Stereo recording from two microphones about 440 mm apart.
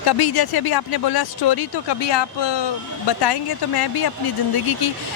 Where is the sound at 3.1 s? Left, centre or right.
Left.